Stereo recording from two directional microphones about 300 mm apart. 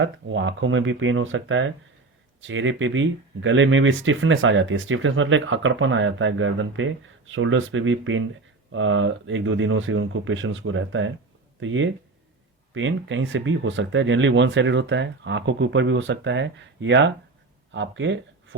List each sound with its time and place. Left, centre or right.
0.0 s speech: right